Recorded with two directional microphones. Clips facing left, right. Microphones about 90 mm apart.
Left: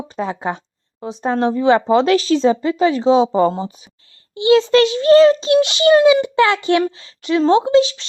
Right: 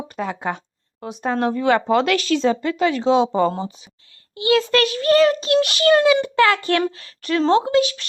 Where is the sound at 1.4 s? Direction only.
20° left (ahead or behind).